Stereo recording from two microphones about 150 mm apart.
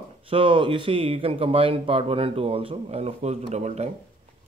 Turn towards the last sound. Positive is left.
turn(degrees=-50)  # may be behind; listen again after turning